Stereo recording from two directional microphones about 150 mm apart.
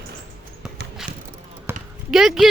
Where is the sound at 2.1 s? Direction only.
Centre (ahead or behind).